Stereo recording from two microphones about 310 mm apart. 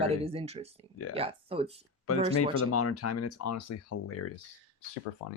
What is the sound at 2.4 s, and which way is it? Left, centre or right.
Speech, left.